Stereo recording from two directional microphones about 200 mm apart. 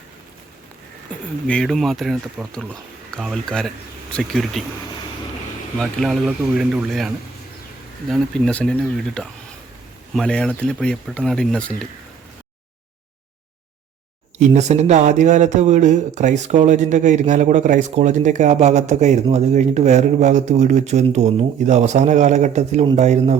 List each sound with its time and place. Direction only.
1.5 s speech: centre (ahead or behind)
5.8 s speech: centre (ahead or behind)
14.3 s speech: 35° right (ahead or behind)